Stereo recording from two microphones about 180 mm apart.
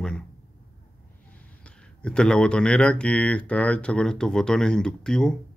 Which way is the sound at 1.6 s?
5° left (ahead or behind).